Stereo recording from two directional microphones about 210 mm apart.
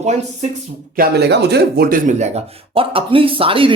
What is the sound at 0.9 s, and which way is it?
Speech, 50° right (ahead or behind).